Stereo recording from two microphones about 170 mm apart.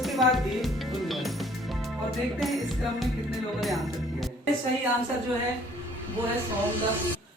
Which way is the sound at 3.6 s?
Centre (ahead or behind).